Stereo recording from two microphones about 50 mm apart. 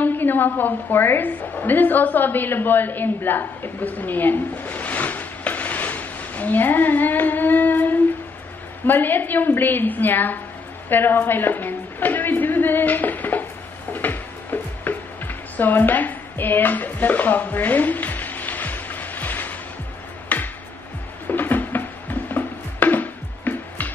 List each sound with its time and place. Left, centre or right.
0.0 s a woman's voice: left
10.9 s a sound: left
13.9 s music: left
21.3 s music: left